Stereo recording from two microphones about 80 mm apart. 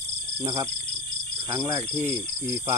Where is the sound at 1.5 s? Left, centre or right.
Right.